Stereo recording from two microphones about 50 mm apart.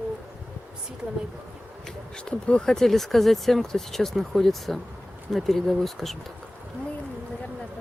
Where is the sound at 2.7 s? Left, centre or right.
Centre.